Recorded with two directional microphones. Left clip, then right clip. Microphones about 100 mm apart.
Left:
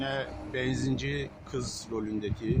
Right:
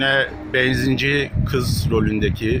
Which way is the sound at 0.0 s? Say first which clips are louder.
Right 15 dB; 30° right (ahead or behind).